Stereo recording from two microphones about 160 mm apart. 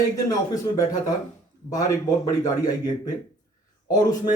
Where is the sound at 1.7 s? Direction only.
20° left (ahead or behind).